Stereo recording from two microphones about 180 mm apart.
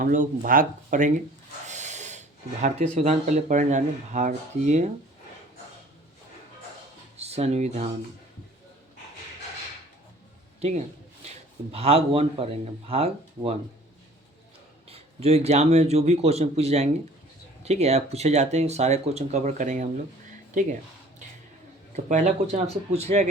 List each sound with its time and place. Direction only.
0.0 s speech: 50° right (ahead or behind)
7.2 s speech: 35° right (ahead or behind)
10.6 s speech: 40° right (ahead or behind)
14.8 s speech: 35° right (ahead or behind)
21.9 s speech: 40° right (ahead or behind)